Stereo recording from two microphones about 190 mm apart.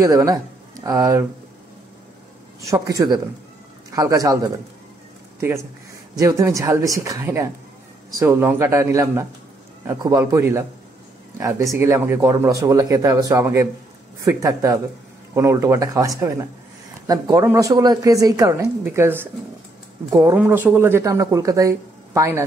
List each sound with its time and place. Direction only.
0.0 s speech: 20° right (ahead or behind)
2.6 s a man's voice: 15° right (ahead or behind)
6.1 s speech: 15° right (ahead or behind)